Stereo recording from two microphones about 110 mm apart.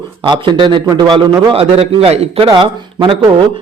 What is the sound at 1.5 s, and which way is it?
A man's voice, 60° right (ahead or behind).